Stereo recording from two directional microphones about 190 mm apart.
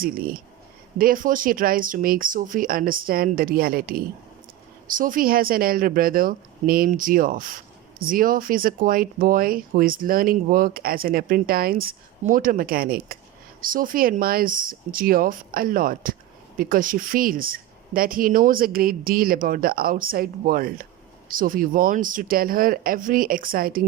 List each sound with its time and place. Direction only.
0.0 s speech: 50° right (ahead or behind)